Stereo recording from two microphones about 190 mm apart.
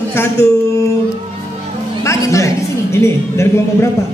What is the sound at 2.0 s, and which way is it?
Music, 15° left (ahead or behind).